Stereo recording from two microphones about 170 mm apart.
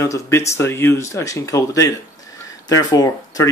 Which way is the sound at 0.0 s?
20° left (ahead or behind).